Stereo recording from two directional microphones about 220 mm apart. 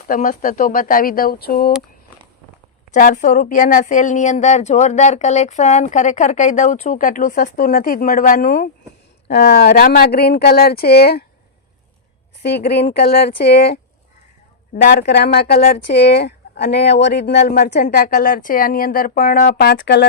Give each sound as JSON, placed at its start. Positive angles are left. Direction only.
{"t": 0.1, "sound": "speech", "side_deg": 40}
{"t": 2.9, "sound": "speech", "side_deg": 35}
{"t": 12.4, "sound": "speech", "side_deg": 50}